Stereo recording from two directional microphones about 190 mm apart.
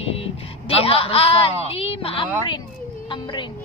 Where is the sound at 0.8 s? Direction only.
30° left (ahead or behind).